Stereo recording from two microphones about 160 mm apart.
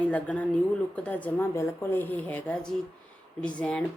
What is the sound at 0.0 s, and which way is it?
Speech, 10° left (ahead or behind).